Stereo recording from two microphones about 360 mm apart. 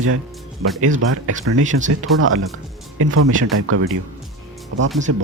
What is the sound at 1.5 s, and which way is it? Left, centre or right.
Speech, right.